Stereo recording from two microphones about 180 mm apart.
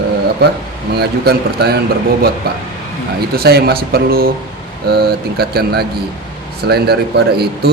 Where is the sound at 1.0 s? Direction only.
65° right (ahead or behind).